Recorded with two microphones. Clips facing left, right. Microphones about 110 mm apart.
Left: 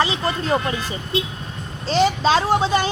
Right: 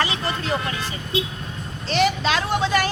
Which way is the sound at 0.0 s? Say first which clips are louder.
Left 3 dB; 30° left (ahead or behind).